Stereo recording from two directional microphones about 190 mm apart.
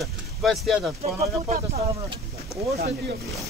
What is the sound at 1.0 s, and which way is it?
Speech, 35° right (ahead or behind).